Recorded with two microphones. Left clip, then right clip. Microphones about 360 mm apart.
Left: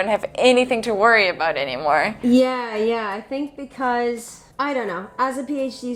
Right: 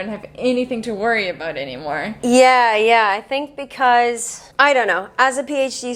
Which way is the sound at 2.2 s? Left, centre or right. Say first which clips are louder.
Right 13 dB; right.